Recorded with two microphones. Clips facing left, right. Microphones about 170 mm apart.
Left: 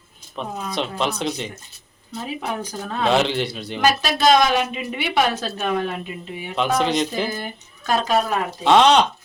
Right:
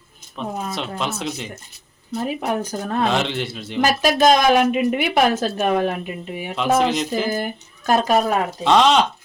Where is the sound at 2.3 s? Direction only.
50° right (ahead or behind).